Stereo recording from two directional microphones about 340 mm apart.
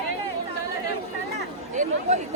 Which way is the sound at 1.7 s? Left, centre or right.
Right.